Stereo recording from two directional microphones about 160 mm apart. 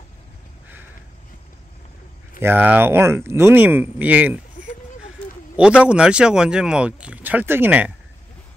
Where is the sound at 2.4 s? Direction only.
10° right (ahead or behind).